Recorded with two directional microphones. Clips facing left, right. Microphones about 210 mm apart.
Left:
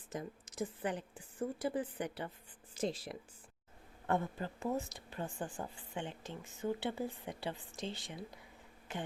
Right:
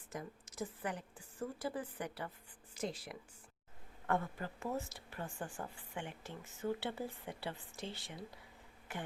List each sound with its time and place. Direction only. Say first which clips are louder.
0.1 s a woman's voice: left 3 dB; 20° left (ahead or behind)